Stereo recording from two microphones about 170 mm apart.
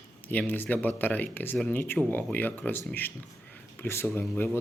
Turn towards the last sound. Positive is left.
turn(degrees=15)  # may be behind; listen again after turning